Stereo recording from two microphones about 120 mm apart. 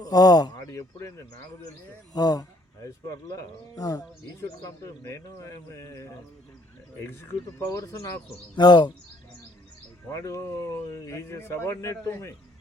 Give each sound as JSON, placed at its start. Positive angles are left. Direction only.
{"t": 0.0, "sound": "speech", "side_deg": 35}
{"t": 7.4, "sound": "speech", "side_deg": 30}
{"t": 10.1, "sound": "speech", "side_deg": 25}